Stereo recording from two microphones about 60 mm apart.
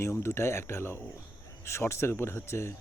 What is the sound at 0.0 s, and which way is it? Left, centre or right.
Speech, left.